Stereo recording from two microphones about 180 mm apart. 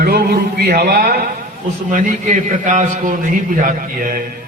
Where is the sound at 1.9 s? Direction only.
45° right (ahead or behind).